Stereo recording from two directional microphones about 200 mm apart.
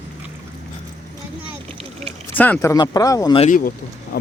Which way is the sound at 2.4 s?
10° left (ahead or behind).